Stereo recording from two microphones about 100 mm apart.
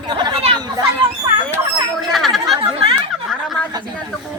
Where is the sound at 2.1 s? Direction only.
Centre (ahead or behind).